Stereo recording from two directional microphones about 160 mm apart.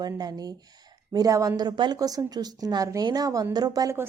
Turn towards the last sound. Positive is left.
turn(degrees=-20)  # may be behind; listen again after turning